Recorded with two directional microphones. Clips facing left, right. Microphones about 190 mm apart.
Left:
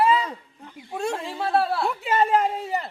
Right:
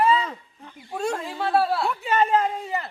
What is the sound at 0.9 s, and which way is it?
Speech, 5° left (ahead or behind).